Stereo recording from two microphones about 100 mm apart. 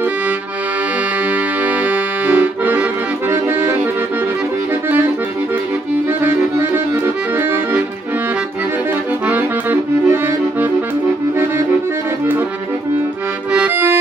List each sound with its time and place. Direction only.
1.9 s accordion: 15° right (ahead or behind)
9.3 s accordion: 20° right (ahead or behind)